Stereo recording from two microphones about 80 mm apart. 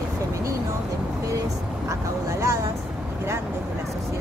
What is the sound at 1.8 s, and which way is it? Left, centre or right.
Vehicle, right.